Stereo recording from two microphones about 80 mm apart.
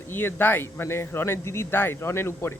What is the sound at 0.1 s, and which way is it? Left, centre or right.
Speech, left.